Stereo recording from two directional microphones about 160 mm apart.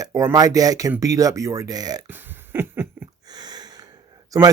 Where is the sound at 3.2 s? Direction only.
25° right (ahead or behind).